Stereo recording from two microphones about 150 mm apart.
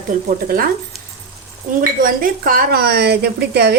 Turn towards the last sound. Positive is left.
turn(degrees=-90)